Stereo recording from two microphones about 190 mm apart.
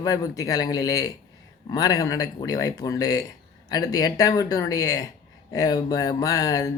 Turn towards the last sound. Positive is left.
turn(degrees=20)  # may be behind; listen again after turning